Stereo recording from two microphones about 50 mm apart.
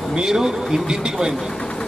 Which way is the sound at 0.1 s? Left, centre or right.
Centre.